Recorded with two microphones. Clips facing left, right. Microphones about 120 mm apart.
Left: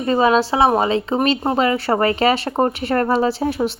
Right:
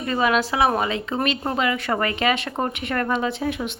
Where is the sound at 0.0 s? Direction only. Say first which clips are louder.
Left 6 dB; 30° left (ahead or behind).